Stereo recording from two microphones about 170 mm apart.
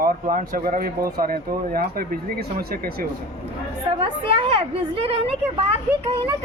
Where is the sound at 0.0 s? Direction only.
55° right (ahead or behind).